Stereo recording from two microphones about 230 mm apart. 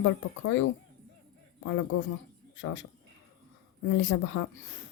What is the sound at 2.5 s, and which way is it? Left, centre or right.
Speech, left.